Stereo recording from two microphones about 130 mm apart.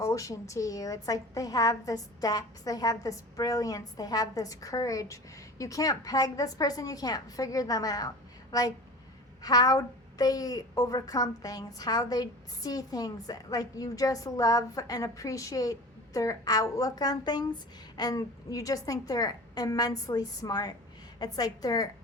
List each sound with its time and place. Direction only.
0.0 s a woman's voice: 25° left (ahead or behind)